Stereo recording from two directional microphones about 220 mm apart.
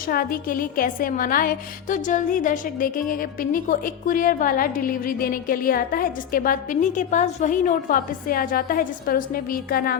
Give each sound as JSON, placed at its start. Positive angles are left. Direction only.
{"t": 0.1, "sound": "a woman's voice", "side_deg": 40}